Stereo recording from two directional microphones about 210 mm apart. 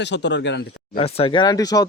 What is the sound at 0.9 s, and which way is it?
Speech, 25° left (ahead or behind).